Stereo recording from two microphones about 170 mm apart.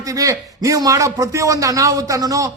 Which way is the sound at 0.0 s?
20° right (ahead or behind).